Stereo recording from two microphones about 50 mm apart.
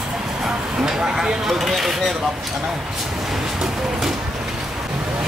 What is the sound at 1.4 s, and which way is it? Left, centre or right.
Speech, centre.